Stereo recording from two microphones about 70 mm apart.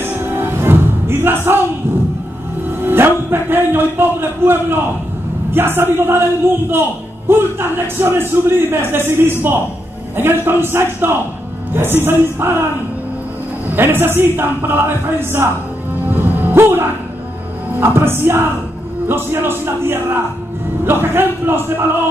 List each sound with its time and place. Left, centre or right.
0.0 s music: right
2.8 s a man's voice: right
13.7 s a man's voice: right
16.1 s music: right
17.8 s a man's voice: right